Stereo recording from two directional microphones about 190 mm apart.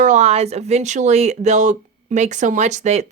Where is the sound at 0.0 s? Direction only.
40° right (ahead or behind).